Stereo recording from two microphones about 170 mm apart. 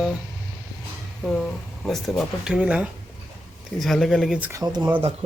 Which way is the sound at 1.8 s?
Centre (ahead or behind).